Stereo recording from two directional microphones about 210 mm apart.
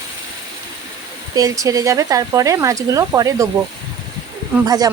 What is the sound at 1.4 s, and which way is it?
Speech, 15° right (ahead or behind).